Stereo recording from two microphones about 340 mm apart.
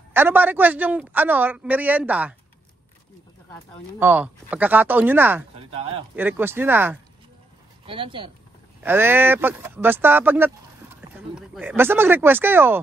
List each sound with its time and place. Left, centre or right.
0.1 s speech: centre
4.0 s speech: centre